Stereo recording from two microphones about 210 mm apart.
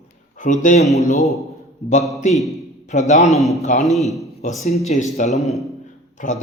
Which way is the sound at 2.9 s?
35° left (ahead or behind).